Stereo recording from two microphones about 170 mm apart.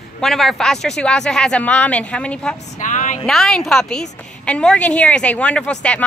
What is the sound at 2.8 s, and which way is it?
Speech, 45° left (ahead or behind).